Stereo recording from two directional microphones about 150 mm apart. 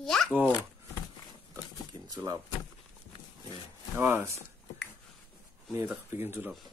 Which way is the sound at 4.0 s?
15° right (ahead or behind).